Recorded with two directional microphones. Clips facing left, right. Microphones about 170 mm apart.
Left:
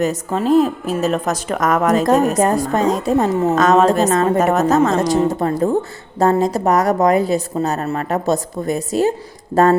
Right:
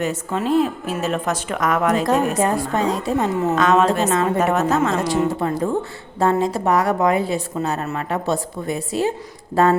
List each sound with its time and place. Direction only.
0.0 s a woman's voice: 40° left (ahead or behind)